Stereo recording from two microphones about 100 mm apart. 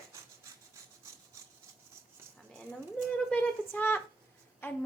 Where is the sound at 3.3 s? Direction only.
15° left (ahead or behind).